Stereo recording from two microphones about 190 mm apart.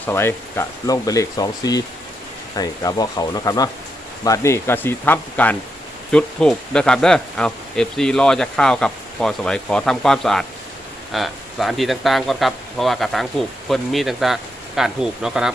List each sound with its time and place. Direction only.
0.1 s speech: 15° left (ahead or behind); by 15.5 s 5° right (ahead or behind)